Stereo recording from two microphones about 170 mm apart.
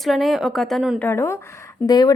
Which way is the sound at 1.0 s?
15° left (ahead or behind).